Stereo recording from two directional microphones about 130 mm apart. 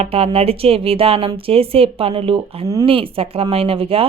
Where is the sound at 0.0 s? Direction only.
50° right (ahead or behind).